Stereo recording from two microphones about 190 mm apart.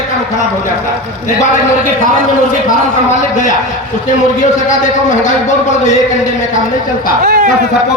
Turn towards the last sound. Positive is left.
turn(degrees=-45)  # may be behind; listen again after turning